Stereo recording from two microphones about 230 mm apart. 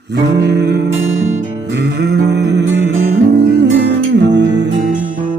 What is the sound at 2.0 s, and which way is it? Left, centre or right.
Music, right.